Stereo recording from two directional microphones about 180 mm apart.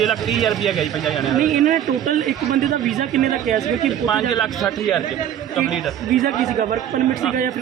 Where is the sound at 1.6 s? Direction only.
45° right (ahead or behind).